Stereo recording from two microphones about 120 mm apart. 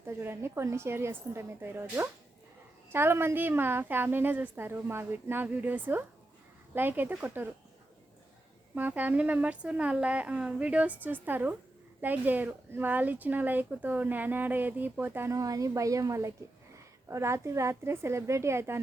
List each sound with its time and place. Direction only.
0.0 s speech: 20° right (ahead or behind)
8.7 s speech: 15° right (ahead or behind)